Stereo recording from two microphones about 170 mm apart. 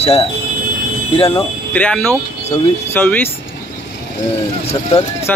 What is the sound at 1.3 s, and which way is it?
Speech, 10° left (ahead or behind).